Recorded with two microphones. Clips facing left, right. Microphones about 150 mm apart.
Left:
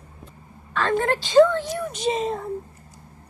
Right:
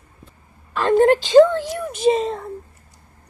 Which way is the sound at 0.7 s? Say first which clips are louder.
Right 5 dB; 15° right (ahead or behind).